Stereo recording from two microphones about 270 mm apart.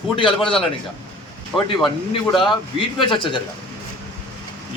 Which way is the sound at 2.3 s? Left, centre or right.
Centre.